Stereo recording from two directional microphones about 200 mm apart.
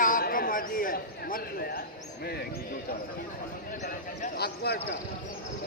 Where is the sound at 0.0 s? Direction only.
45° left (ahead or behind).